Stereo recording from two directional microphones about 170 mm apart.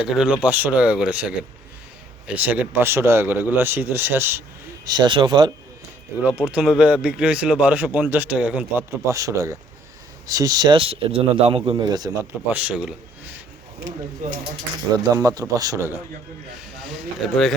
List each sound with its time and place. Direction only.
0.0 s a man's voice: 5° right (ahead or behind)
4.9 s a man's voice: 25° right (ahead or behind)
6.2 s a man's voice: 5° right (ahead or behind)
9.1 s a man's voice: 20° right (ahead or behind)
12.3 s a man's voice: 10° right (ahead or behind)
13.7 s speech: 50° right (ahead or behind)
15.1 s a man's voice: 20° right (ahead or behind)
16.8 s speech: centre (ahead or behind)